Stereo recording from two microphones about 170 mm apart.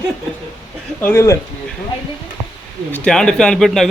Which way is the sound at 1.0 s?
15° left (ahead or behind).